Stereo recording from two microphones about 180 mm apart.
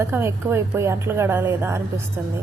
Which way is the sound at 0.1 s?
15° right (ahead or behind).